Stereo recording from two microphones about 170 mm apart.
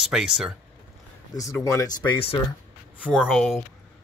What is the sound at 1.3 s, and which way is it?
Speech, 20° left (ahead or behind).